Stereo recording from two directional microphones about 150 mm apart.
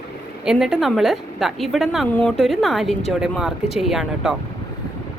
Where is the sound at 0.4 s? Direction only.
5° right (ahead or behind).